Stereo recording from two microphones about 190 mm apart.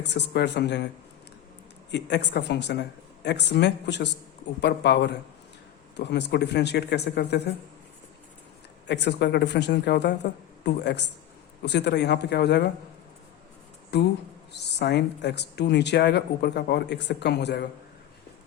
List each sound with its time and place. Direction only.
0.0 s speech: 65° left (ahead or behind)
1.9 s speech: 65° left (ahead or behind)
8.9 s a man's voice: 65° left (ahead or behind)
13.9 s speech: 60° left (ahead or behind)